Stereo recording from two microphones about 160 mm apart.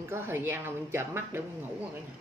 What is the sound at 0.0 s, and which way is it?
A woman's voice, 15° right (ahead or behind).